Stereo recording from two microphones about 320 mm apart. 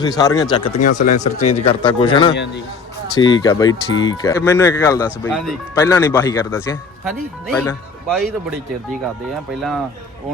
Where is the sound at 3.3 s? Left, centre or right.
Centre.